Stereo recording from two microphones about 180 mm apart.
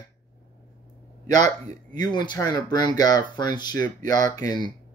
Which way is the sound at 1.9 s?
25° left (ahead or behind).